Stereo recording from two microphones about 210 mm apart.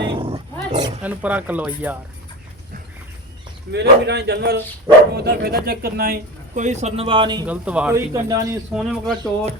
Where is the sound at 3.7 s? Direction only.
55° right (ahead or behind); by 7.4 s 20° right (ahead or behind).